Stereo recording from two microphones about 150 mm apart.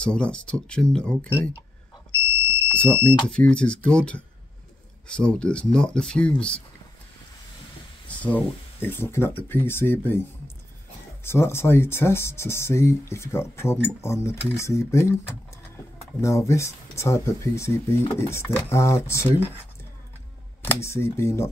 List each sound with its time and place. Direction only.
0.0 s speech: 5° left (ahead or behind)
3.0 s speech: 10° left (ahead or behind)
8.1 s speech: 10° left (ahead or behind)
11.2 s speech: 15° left (ahead or behind)
20.8 s speech: 15° left (ahead or behind)